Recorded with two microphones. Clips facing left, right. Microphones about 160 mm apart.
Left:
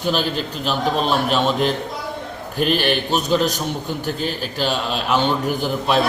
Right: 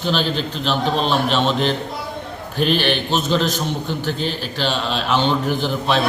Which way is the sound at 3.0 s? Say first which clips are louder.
Left 1 dB; 10° left (ahead or behind).